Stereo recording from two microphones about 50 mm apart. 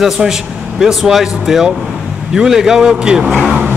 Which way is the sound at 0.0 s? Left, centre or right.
Centre.